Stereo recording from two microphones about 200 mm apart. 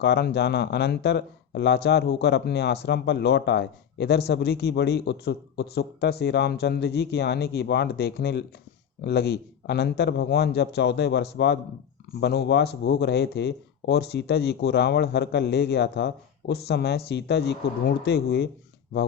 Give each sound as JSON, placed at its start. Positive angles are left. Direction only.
{"t": 0.0, "sound": "speech", "side_deg": 55}